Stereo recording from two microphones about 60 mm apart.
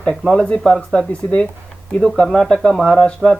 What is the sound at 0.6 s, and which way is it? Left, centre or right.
Speech, centre.